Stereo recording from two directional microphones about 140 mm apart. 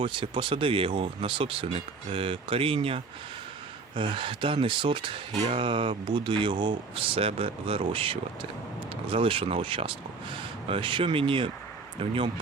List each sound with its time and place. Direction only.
0.0 s speech: 35° right (ahead or behind)